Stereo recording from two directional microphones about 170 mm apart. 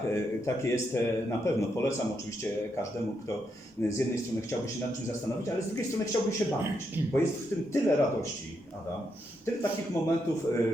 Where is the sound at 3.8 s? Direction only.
15° left (ahead or behind).